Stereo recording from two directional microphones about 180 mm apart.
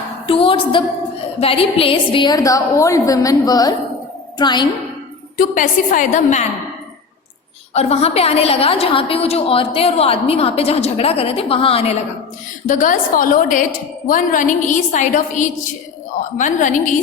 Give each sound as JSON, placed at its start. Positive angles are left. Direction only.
{"t": 0.3, "sound": "a sound", "side_deg": 30}
{"t": 1.4, "sound": "a woman's voice", "side_deg": 30}
{"t": 5.4, "sound": "a woman's voice", "side_deg": 50}
{"t": 7.7, "sound": "a woman's voice", "side_deg": 35}
{"t": 12.6, "sound": "a woman's voice", "side_deg": 45}